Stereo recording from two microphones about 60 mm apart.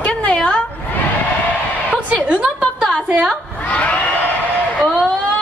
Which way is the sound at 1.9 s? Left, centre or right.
Right.